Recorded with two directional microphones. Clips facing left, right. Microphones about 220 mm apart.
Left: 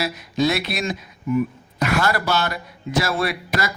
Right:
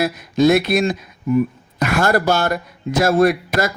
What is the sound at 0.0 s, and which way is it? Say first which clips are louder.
Speech: right 6 dB; 50° right (ahead or behind).